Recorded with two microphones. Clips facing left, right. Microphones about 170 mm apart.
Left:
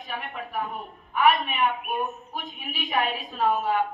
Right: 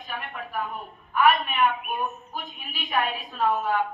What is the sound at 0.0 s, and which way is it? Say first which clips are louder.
A woman's voice: left 1 dB; 20° left (ahead or behind).